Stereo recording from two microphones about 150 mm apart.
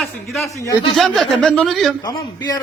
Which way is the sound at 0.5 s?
20° left (ahead or behind).